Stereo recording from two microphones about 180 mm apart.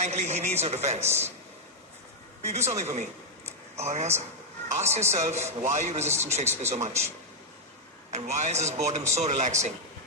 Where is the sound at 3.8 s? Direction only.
40° right (ahead or behind).